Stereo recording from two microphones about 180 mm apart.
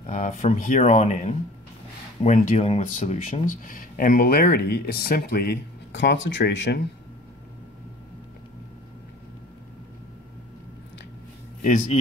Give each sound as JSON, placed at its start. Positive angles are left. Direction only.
{"t": 0.0, "sound": "speech", "side_deg": 45}
{"t": 11.6, "sound": "a man's voice", "side_deg": 45}